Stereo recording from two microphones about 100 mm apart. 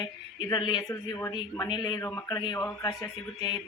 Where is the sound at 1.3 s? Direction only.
50° left (ahead or behind).